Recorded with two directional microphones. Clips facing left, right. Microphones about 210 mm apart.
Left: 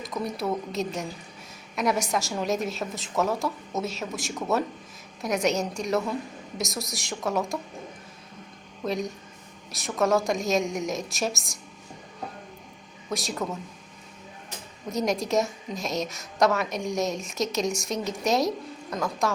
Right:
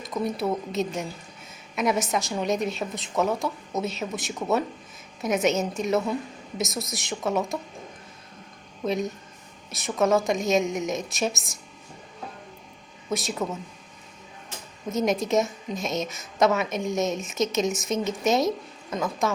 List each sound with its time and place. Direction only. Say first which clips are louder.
0.0 s a woman's voice: right 3 dB; centre (ahead or behind)
8.8 s a woman's voice: right 2 dB; centre (ahead or behind)
13.1 s a woman's voice: right 2 dB; centre (ahead or behind)
14.8 s a woman's voice: right 2 dB; centre (ahead or behind)